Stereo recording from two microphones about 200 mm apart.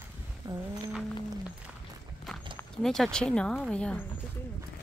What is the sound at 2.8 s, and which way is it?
Speech, centre (ahead or behind).